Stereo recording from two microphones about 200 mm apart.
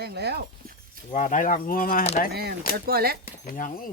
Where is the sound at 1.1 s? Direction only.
40° left (ahead or behind).